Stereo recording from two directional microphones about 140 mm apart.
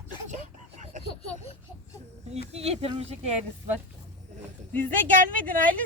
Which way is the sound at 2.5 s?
50° right (ahead or behind).